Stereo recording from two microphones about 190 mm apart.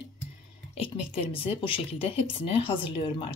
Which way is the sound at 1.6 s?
30° left (ahead or behind).